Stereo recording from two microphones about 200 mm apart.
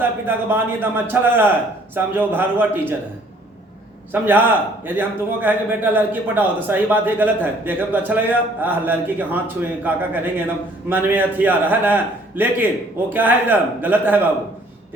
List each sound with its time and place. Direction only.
0.0 s a man's voice: 10° right (ahead or behind)
4.1 s a man's voice: 10° right (ahead or behind)